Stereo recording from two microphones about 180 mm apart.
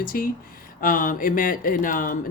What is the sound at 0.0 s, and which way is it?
Speech, 55° left (ahead or behind).